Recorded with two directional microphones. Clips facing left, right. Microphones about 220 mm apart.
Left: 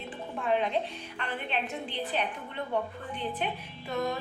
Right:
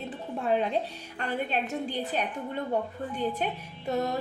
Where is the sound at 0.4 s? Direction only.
40° right (ahead or behind).